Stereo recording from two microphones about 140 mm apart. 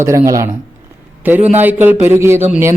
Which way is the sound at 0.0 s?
20° right (ahead or behind).